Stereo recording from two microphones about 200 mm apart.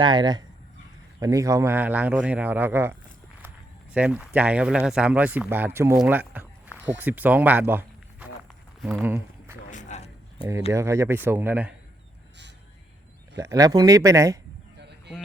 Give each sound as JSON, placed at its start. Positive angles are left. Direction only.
{"t": 0.0, "sound": "speech", "side_deg": -20}
{"t": 3.9, "sound": "speech", "side_deg": -5}
{"t": 9.6, "sound": "a sound", "side_deg": 35}
{"t": 10.7, "sound": "speech", "side_deg": -15}
{"t": 13.3, "sound": "speech", "side_deg": -15}
{"t": 14.8, "sound": "a sound", "side_deg": -55}